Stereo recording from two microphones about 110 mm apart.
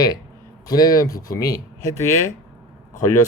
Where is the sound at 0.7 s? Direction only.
35° left (ahead or behind).